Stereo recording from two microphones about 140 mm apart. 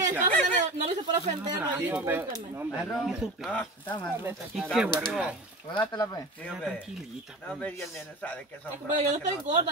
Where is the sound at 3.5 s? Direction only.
10° left (ahead or behind).